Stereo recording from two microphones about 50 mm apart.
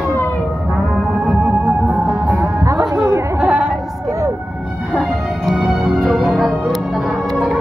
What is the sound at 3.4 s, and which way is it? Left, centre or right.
Music, right.